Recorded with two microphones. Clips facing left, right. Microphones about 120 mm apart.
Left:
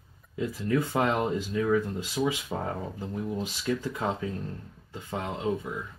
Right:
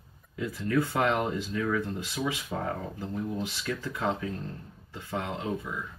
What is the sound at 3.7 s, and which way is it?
Speech, 25° left (ahead or behind).